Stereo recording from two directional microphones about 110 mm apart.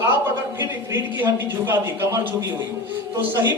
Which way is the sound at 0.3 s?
20° right (ahead or behind).